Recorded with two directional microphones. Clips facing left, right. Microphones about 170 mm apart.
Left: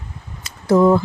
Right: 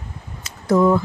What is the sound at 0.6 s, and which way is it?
Speech, 30° left (ahead or behind).